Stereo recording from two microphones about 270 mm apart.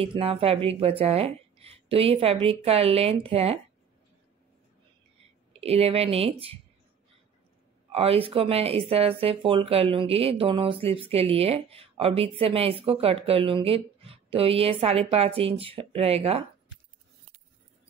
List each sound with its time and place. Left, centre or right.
0.0 s speech: right
5.5 s speech: right
7.9 s speech: right